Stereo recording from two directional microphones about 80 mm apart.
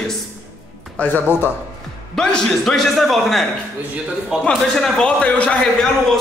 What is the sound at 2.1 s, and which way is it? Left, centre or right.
Speech, centre.